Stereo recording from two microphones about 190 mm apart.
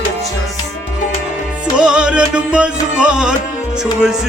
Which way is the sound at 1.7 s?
5° right (ahead or behind).